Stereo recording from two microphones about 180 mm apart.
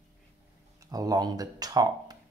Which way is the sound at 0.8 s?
20° right (ahead or behind).